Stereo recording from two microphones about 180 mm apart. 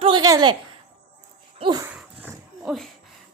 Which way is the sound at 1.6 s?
25° right (ahead or behind).